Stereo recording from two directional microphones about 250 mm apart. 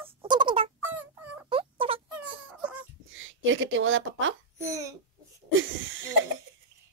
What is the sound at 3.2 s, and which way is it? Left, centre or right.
A woman's voice, right.